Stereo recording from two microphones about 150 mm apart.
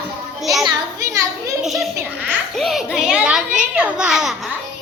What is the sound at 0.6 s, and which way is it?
Children playing, 25° right (ahead or behind).